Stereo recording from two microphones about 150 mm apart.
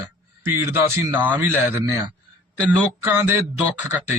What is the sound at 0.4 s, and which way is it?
Speech, 15° right (ahead or behind).